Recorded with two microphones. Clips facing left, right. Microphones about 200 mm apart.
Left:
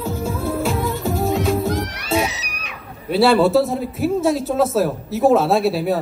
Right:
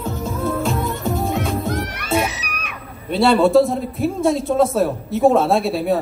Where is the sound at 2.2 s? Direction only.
55° right (ahead or behind).